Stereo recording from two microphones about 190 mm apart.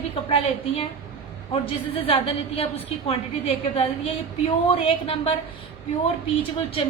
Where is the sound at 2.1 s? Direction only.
30° left (ahead or behind).